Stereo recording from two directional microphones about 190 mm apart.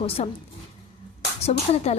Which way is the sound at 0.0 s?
30° left (ahead or behind).